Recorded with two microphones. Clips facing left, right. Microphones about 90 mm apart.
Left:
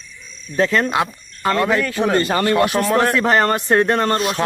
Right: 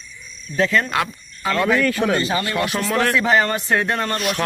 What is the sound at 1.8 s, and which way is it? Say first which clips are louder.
Speech: even; 25° left (ahead or behind).